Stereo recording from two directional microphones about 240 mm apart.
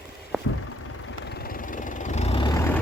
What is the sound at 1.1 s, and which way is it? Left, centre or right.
Vehicle, left.